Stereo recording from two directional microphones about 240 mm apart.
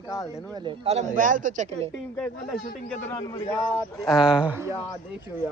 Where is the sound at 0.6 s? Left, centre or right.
Right.